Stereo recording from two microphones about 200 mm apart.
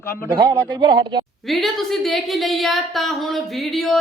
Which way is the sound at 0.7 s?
20° right (ahead or behind).